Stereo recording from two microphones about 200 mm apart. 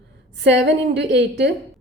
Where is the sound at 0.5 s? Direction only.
60° right (ahead or behind).